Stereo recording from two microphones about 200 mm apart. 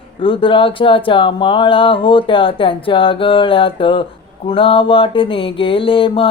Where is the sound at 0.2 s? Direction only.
25° left (ahead or behind).